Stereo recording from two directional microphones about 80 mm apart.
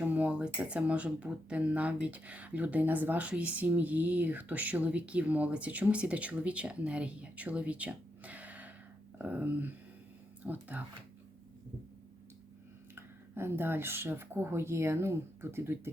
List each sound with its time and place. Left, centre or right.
0.0 s a woman's voice: centre
13.0 s a woman's voice: right